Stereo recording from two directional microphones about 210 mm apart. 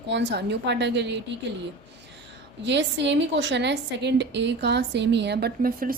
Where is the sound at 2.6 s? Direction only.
55° right (ahead or behind).